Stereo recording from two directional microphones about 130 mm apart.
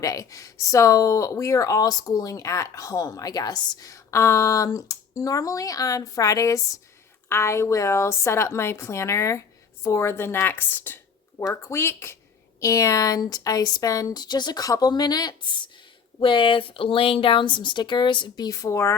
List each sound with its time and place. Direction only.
0.0 s speech: 25° left (ahead or behind)